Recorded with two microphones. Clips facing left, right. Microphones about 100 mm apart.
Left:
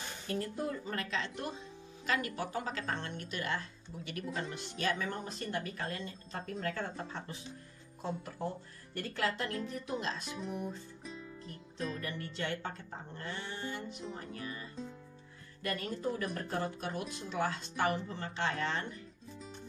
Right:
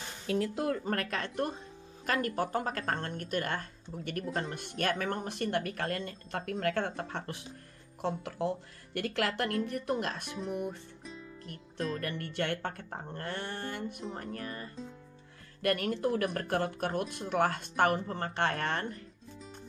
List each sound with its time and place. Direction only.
0.3 s speech: 90° right
0.8 s speech: 55° right (ahead or behind)
8.0 s speech: 90° right; by 10.8 s 60° right (ahead or behind)
11.1 s music: centre (ahead or behind)
12.0 s speech: 60° right (ahead or behind)
15.6 s speech: 70° right (ahead or behind); by 19.0 s 50° right (ahead or behind)